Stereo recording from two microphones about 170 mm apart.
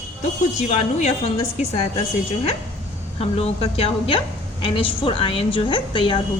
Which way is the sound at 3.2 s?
35° left (ahead or behind).